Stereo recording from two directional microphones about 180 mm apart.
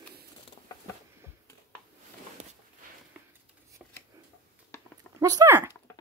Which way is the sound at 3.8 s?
5° right (ahead or behind).